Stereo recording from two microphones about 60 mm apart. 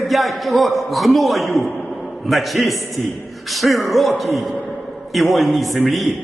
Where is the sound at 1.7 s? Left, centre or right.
Left.